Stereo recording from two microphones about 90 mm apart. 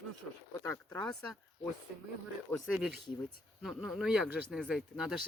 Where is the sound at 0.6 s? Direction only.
20° left (ahead or behind).